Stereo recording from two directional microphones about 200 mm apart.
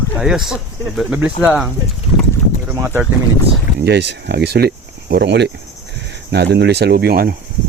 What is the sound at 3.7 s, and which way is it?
Speech, 55° right (ahead or behind).